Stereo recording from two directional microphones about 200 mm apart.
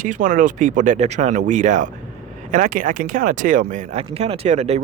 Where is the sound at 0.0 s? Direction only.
40° right (ahead or behind).